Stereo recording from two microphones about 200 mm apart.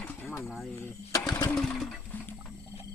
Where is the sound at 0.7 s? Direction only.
10° left (ahead or behind).